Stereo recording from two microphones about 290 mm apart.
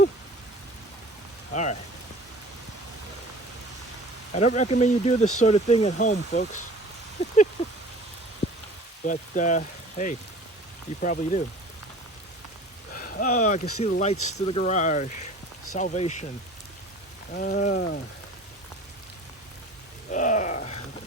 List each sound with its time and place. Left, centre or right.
1.5 s speech: left
4.4 s speech: left
5.2 s speech: left
5.5 s speech: left
8.4 s a sound: left
9.0 s speech: left
12.9 s speech: left
17.3 s speech: left
20.1 s a sound: left